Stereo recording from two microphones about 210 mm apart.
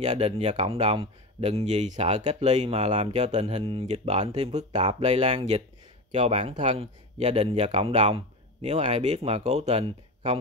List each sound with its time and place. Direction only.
0.0 s speech: 30° right (ahead or behind)